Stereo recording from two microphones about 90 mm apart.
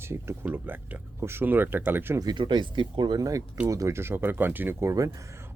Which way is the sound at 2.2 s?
55° right (ahead or behind).